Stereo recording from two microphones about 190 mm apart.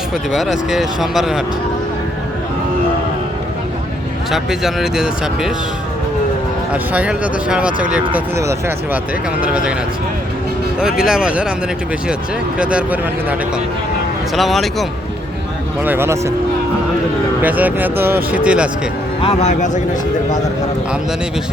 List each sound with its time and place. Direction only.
0.3 s speech: centre (ahead or behind)
4.3 s speech: centre (ahead or behind)
6.9 s speech: 5° right (ahead or behind)
11.0 s speech: 5° right (ahead or behind)
12.5 s speech: 5° right (ahead or behind)
14.3 s speech: centre (ahead or behind)
15.8 s speech: 10° right (ahead or behind)
17.4 s speech: 10° right (ahead or behind)
19.2 s speech: 35° left (ahead or behind)